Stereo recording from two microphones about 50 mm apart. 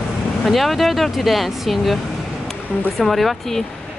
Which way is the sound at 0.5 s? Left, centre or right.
Centre.